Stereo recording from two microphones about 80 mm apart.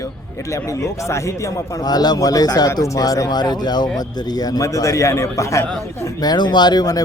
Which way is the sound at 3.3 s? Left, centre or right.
Left.